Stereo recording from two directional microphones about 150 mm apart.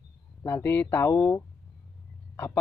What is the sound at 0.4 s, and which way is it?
Speech, 15° left (ahead or behind).